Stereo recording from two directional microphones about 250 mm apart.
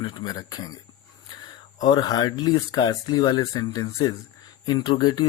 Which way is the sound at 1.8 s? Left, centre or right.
Centre.